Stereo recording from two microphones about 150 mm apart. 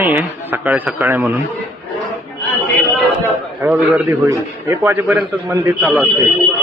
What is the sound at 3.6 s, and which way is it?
A man's voice, 10° right (ahead or behind).